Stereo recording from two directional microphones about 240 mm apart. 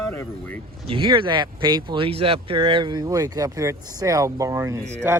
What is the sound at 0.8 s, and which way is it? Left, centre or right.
Speech, right.